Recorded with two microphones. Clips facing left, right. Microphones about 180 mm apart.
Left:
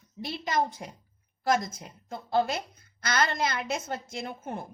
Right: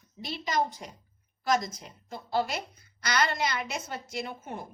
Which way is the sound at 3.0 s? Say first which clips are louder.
Left 1 dB; 50° left (ahead or behind).